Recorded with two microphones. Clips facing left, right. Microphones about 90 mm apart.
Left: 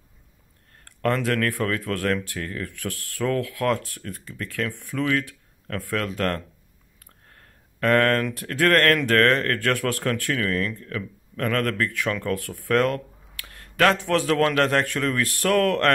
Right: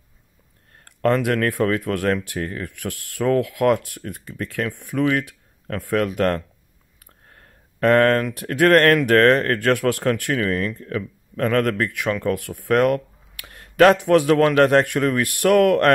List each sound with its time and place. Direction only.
0.8 s speech: 20° right (ahead or behind)
7.8 s speech: 20° right (ahead or behind)